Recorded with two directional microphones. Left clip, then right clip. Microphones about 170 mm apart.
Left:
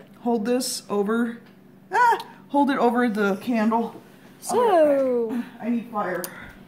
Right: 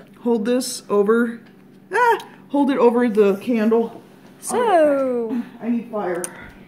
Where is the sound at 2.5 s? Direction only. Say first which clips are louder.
Right 4 dB; 30° left (ahead or behind).